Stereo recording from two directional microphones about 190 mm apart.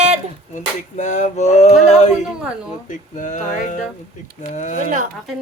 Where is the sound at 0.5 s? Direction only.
40° left (ahead or behind).